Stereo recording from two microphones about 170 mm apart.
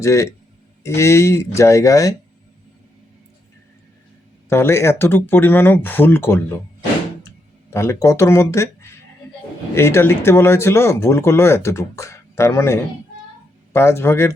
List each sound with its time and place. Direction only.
0.0 s speech: 15° left (ahead or behind)
4.4 s speech: 15° left (ahead or behind)
7.7 s speech: 15° left (ahead or behind)